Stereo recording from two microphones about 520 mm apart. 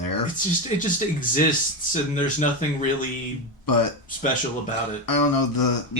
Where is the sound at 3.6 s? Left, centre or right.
Left.